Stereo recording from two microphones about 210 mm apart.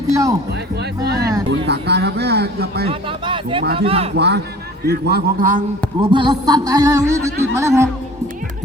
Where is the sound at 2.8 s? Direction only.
25° right (ahead or behind).